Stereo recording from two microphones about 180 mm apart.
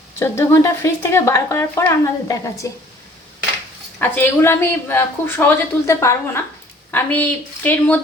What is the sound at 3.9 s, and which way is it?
Speech, 10° left (ahead or behind).